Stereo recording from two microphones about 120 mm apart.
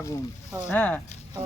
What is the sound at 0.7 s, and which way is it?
Speech, 10° left (ahead or behind).